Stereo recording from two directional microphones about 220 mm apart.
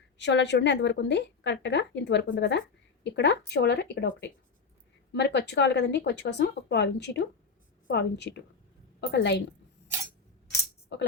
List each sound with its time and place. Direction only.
0.2 s a woman's voice: 50° left (ahead or behind)
10.9 s a woman's voice: 50° left (ahead or behind)